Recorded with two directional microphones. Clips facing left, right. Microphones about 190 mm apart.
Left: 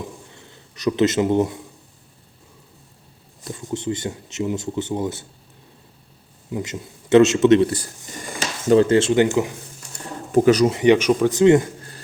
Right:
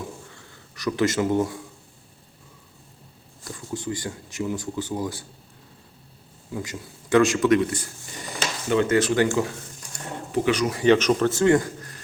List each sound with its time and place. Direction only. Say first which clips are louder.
0.3 s speech: left 1 dB; 20° left (ahead or behind)
3.4 s speech: left 5 dB; 20° left (ahead or behind)
6.5 s a man's voice: left 4 dB; 20° left (ahead or behind)
10.3 s speech: left 8 dB; 40° left (ahead or behind)
10.7 s speech: left 3 dB; 20° left (ahead or behind)